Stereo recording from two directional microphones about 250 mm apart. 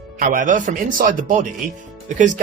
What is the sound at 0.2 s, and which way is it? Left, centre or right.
Speech, right.